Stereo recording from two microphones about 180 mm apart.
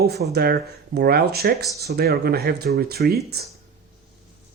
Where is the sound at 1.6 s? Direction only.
20° left (ahead or behind).